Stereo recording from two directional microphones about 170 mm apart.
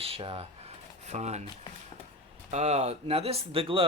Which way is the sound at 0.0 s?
35° right (ahead or behind).